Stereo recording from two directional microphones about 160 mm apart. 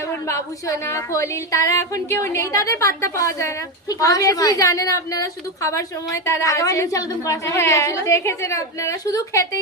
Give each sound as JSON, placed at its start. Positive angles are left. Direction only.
{"t": 0.3, "sound": "a woman's voice", "side_deg": 20}